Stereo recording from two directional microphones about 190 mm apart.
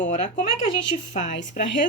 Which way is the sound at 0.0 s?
45° left (ahead or behind).